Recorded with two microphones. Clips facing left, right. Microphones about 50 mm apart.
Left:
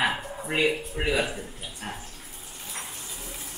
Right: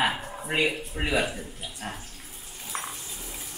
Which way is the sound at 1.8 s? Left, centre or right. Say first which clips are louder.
Even; centre.